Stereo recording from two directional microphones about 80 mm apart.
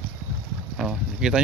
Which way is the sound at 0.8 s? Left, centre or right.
Centre.